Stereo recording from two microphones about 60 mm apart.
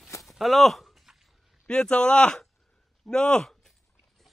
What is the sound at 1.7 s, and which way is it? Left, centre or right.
Speech, centre.